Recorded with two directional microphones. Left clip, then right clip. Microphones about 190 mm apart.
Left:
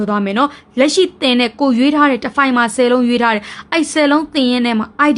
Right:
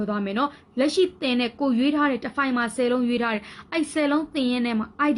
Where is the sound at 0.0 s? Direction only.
25° left (ahead or behind).